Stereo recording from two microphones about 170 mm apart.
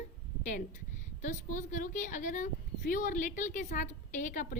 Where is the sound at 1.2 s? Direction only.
50° left (ahead or behind).